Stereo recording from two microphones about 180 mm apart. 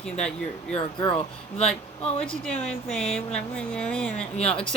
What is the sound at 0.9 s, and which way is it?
Speech, 30° left (ahead or behind).